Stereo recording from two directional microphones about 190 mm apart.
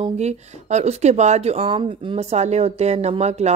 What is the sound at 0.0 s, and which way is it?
A woman's voice, 35° right (ahead or behind).